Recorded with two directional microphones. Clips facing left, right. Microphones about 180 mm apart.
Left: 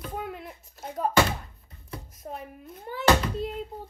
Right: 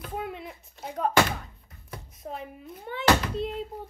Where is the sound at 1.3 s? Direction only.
30° left (ahead or behind).